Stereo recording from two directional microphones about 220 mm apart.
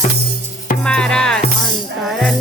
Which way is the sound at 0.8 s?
5° left (ahead or behind).